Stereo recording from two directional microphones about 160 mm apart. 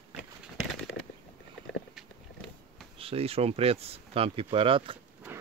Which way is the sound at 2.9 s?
35° right (ahead or behind).